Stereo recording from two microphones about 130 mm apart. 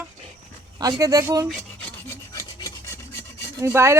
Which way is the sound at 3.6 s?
20° right (ahead or behind).